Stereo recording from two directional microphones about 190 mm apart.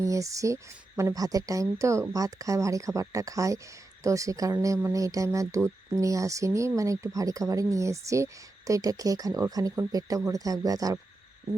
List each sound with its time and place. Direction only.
0.0 s speech: 15° right (ahead or behind)